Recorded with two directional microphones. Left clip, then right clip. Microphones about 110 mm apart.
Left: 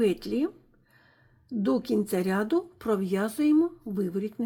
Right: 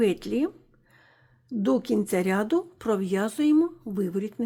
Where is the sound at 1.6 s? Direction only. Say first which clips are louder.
Right 2 dB; 30° right (ahead or behind).